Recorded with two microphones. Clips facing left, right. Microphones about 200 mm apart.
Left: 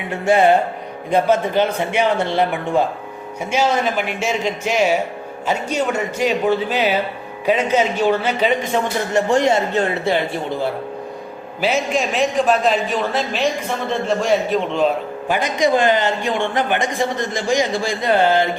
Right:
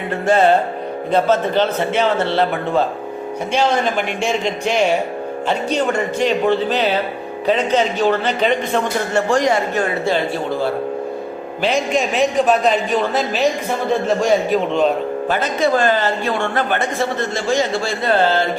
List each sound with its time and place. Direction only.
0.1 s a man's voice: 10° left (ahead or behind)
9.3 s speech: 25° left (ahead or behind)
11.6 s a man's voice: centre (ahead or behind)
14.7 s a man's voice: centre (ahead or behind)
15.3 s a man's voice: 15° left (ahead or behind)